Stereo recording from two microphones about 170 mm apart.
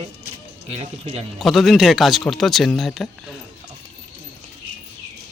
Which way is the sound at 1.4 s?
Centre (ahead or behind).